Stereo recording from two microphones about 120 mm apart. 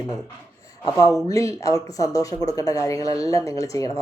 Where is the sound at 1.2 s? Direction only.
25° left (ahead or behind).